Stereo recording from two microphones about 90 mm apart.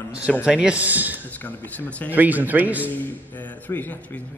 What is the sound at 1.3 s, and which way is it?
Speech, 20° left (ahead or behind).